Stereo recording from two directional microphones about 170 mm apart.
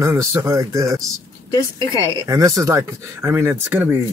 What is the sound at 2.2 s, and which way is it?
Speech, 20° right (ahead or behind).